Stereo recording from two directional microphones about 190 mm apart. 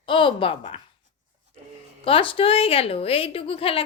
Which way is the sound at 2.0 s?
30° left (ahead or behind).